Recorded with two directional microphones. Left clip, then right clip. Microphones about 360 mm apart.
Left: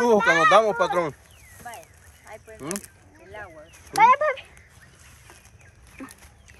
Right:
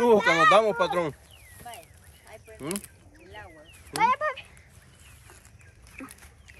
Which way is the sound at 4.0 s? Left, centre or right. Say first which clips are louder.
Left 7 dB; centre.